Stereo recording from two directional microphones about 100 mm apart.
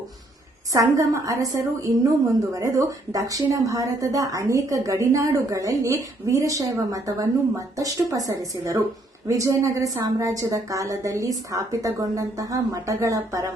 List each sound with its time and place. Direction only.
0.7 s a woman's voice: 35° right (ahead or behind)